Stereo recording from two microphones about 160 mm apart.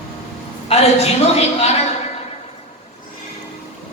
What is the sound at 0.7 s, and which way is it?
A woman's voice, 40° left (ahead or behind).